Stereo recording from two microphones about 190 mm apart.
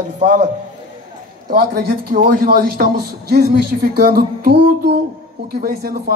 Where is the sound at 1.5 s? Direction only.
50° right (ahead or behind).